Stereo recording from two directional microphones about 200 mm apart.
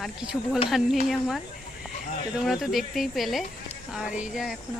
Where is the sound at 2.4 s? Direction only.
Centre (ahead or behind).